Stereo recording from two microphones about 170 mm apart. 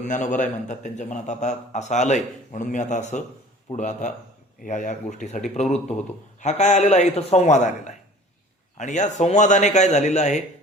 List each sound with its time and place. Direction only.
0.0 s a man's voice: 45° left (ahead or behind)